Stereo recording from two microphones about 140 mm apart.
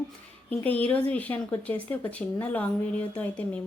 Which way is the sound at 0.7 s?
10° left (ahead or behind).